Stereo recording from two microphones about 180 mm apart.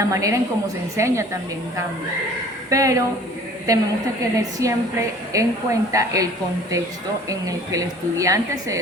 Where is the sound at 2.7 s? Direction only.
15° right (ahead or behind).